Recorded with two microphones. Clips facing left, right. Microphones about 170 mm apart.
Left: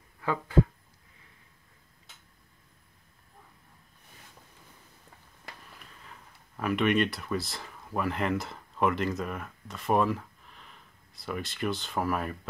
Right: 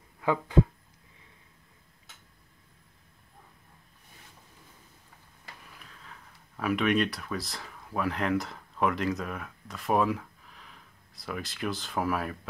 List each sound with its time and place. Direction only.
0.2 s speech: 15° right (ahead or behind)
5.8 s speech: 5° left (ahead or behind)